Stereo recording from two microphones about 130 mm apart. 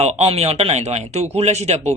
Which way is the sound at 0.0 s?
55° right (ahead or behind).